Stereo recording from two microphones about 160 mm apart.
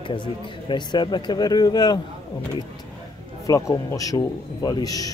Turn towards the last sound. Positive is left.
turn(degrees=25)  # may be behind; listen again after turning